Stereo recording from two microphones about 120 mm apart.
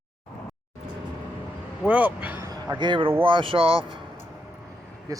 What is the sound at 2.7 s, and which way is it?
Speech, 40° right (ahead or behind).